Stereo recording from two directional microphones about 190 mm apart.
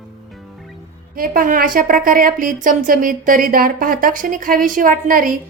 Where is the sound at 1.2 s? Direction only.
50° right (ahead or behind).